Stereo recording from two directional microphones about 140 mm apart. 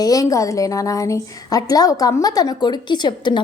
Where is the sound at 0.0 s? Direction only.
25° left (ahead or behind).